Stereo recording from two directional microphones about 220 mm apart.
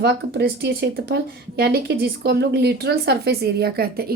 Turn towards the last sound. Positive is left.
turn(degrees=-45)  # may be behind; listen again after turning